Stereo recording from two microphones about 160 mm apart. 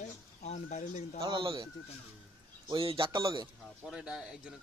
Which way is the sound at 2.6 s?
35° right (ahead or behind).